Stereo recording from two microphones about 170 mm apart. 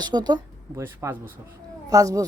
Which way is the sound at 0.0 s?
25° right (ahead or behind).